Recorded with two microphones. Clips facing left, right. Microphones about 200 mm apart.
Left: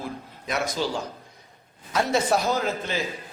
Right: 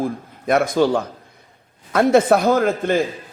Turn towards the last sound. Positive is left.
turn(degrees=-55)  # may be behind; listen again after turning